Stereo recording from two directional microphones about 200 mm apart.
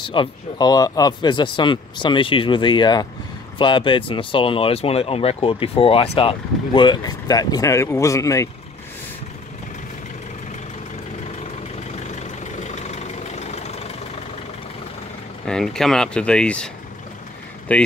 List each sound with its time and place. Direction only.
0.0 s speech: 25° left (ahead or behind)
12.2 s vehicle: 35° left (ahead or behind)
15.4 s speech: 5° left (ahead or behind)